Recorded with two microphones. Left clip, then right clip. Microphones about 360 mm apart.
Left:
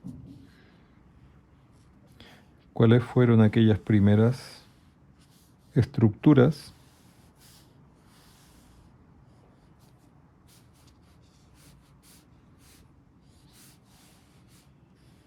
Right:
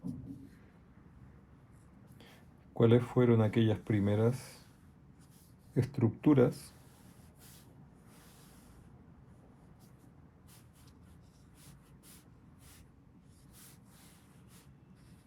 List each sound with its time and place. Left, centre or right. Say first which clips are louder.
2.7 s speech: left 5 dB; left
5.7 s speech: left 7 dB; left